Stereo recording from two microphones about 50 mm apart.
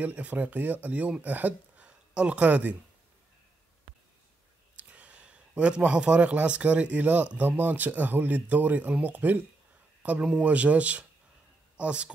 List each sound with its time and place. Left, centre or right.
0.0 s speech: right
1.9 s speech: right
4.7 s a sound: right
5.9 s speech: centre; by 9.4 s right
10.0 s speech: right